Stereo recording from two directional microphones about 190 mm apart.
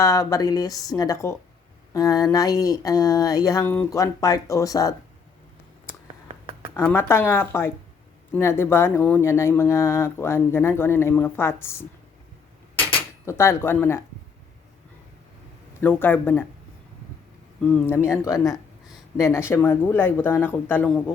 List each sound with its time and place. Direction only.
0.0 s speech: 15° left (ahead or behind)
6.7 s speech: 10° left (ahead or behind)
13.2 s speech: 15° left (ahead or behind)
15.8 s speech: 10° left (ahead or behind)
17.6 s speech: 5° left (ahead or behind)
17.9 s speech: 15° left (ahead or behind)